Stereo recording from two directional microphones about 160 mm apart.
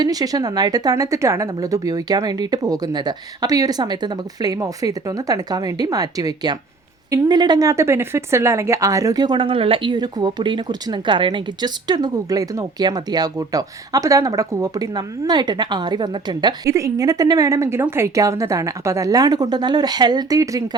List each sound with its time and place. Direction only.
0.0 s speech: 25° right (ahead or behind)